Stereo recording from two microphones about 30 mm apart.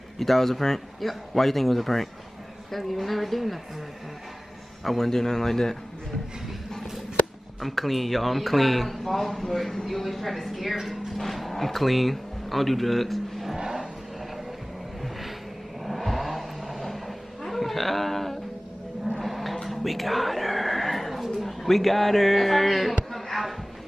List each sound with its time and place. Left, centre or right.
0.2 s speech: centre
4.8 s speech: centre
7.6 s speech: centre
13.6 s vehicle: right
15.0 s vehicle: centre
16.8 s a sound: centre